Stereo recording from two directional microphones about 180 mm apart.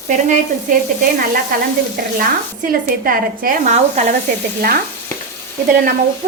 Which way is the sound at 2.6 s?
50° right (ahead or behind).